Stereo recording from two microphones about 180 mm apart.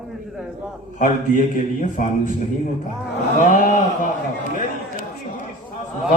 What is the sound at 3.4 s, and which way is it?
Speech, 45° left (ahead or behind).